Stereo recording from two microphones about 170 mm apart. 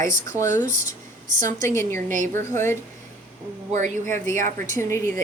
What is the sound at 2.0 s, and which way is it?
Speech, 45° right (ahead or behind).